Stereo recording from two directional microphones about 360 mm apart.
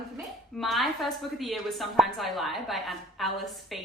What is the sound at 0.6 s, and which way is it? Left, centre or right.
A woman's voice, centre.